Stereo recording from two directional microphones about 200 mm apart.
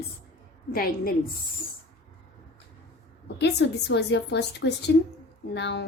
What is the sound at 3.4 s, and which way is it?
A woman's voice, 60° left (ahead or behind).